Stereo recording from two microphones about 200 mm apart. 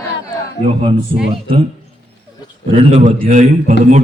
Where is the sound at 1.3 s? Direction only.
30° right (ahead or behind).